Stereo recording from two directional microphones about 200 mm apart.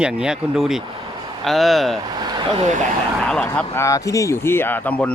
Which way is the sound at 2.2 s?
20° right (ahead or behind).